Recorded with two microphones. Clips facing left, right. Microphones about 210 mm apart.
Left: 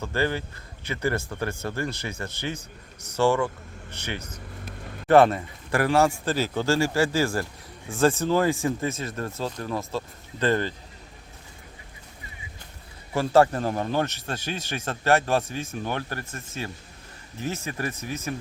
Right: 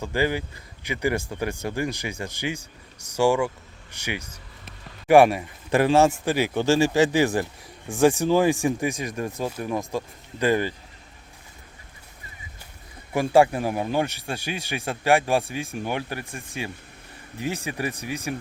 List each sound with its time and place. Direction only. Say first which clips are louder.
0.0 s a man's voice: right 2 dB; 15° right (ahead or behind)
13.1 s a man's voice: right 1 dB; 10° right (ahead or behind)